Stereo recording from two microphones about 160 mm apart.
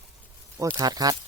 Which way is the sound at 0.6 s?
20° right (ahead or behind).